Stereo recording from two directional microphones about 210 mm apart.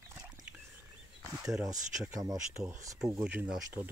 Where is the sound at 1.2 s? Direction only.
15° right (ahead or behind).